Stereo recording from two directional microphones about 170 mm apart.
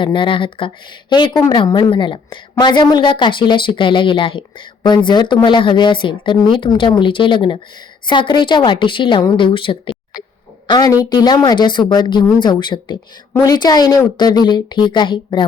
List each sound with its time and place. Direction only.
0.0 s a woman's voice: 30° left (ahead or behind)